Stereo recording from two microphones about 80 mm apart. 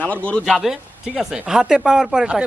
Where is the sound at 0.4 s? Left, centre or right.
Centre.